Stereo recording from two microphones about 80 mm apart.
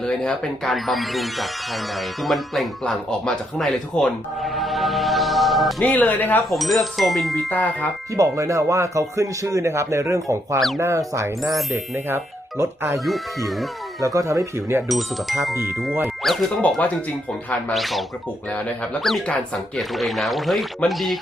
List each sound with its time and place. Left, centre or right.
0.0 s speech: centre
5.8 s speech: centre
6.5 s speech: centre
7.5 s speech: centre
8.1 s speech: right
13.1 s speech: centre
14.0 s speech: right
14.8 s speech: centre
16.2 s music: centre
16.6 s speech: centre
17.7 s speech: centre
19.9 s speech: centre